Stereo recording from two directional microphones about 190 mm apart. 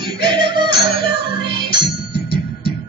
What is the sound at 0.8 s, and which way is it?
Music, 55° left (ahead or behind).